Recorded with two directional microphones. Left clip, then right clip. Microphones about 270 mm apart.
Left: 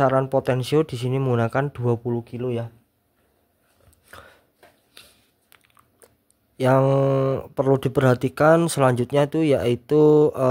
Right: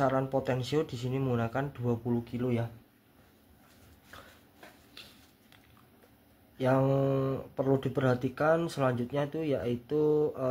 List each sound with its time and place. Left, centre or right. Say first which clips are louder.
0.0 s speech: left 9 dB; left
4.1 s chopping: left 7 dB; left
5.0 s a sound: left 2 dB; left
6.6 s speech: left 9 dB; left